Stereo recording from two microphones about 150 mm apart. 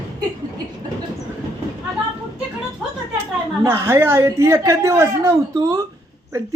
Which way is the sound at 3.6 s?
15° right (ahead or behind).